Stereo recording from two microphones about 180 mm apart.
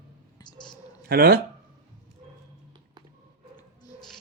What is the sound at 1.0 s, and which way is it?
Speech, 60° right (ahead or behind).